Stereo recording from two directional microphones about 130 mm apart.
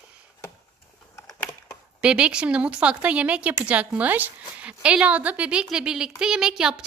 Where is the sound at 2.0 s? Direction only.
10° right (ahead or behind).